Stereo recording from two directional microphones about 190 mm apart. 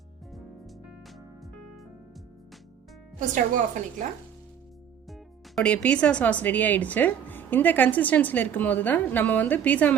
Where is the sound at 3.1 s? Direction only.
40° right (ahead or behind).